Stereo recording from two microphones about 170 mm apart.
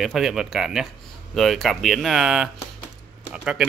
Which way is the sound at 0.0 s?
Centre (ahead or behind).